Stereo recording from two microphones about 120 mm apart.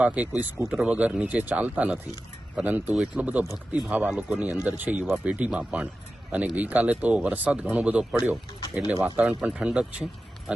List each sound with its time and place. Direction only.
0.0 s speech: 15° right (ahead or behind)